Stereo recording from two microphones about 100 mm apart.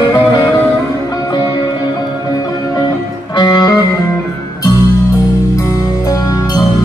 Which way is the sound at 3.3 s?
45° left (ahead or behind).